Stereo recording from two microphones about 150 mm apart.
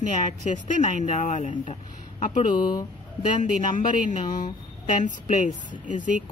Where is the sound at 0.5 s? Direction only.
55° left (ahead or behind).